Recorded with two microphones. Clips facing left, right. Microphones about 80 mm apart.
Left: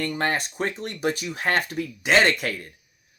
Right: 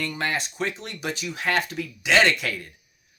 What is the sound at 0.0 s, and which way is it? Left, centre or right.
Speech, left.